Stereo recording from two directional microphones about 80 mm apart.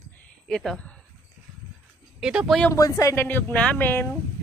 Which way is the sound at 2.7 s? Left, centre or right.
Left.